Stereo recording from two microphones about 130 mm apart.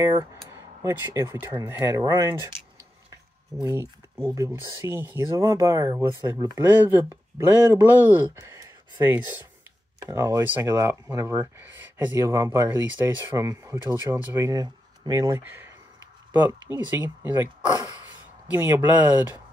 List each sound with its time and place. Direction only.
0.0 s speech: 20° right (ahead or behind)
3.6 s speech: 20° right (ahead or behind)
6.6 s speech: 15° right (ahead or behind)
18.5 s speech: 20° right (ahead or behind)